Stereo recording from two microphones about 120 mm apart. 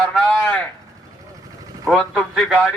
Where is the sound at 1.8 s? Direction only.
5° left (ahead or behind).